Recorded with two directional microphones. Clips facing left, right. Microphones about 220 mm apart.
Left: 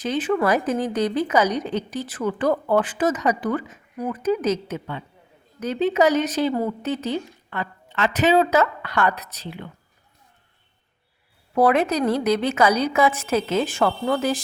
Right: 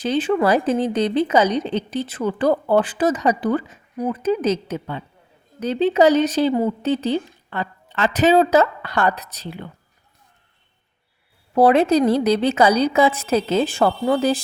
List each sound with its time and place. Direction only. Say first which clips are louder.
0.0 s a woman's voice: right 3 dB; 30° right (ahead or behind)
6.5 s a woman's voice: right 4 dB; 20° right (ahead or behind)
6.8 s a woman's voice: right 5 dB; 30° right (ahead or behind)
11.5 s a woman's voice: right 4 dB; 30° right (ahead or behind)